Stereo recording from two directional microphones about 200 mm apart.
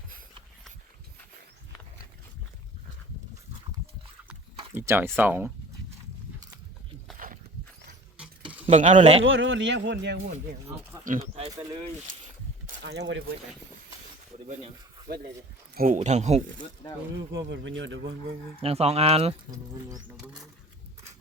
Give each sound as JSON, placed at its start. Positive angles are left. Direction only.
{"t": 4.3, "sound": "a sound", "side_deg": -10}
{"t": 7.2, "sound": "a sound", "side_deg": -45}
{"t": 8.6, "sound": "speech", "side_deg": -30}
{"t": 9.2, "sound": "speech", "side_deg": -70}
{"t": 11.0, "sound": "speech", "side_deg": -35}
{"t": 12.8, "sound": "speech", "side_deg": -55}
{"t": 14.3, "sound": "a sound", "side_deg": -35}
{"t": 15.7, "sound": "speech", "side_deg": -45}
{"t": 17.2, "sound": "speech", "side_deg": -65}
{"t": 18.6, "sound": "speech", "side_deg": -30}